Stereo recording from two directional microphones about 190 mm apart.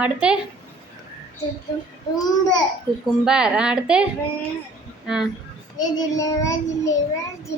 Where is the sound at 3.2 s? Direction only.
5° right (ahead or behind).